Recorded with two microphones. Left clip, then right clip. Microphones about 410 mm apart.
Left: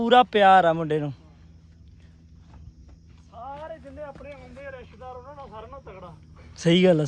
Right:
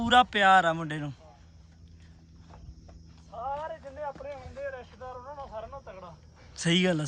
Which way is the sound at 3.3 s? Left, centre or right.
Centre.